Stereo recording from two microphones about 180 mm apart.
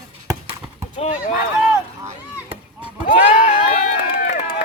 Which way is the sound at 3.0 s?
40° left (ahead or behind).